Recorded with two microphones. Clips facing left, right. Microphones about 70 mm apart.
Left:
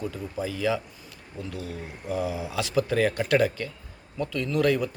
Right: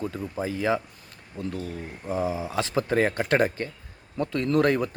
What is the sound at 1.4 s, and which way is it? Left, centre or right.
Speech, right.